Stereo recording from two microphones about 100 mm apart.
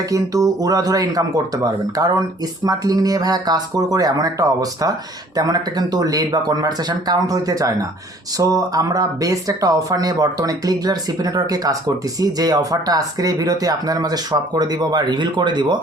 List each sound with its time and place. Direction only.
0.1 s speech: 35° right (ahead or behind)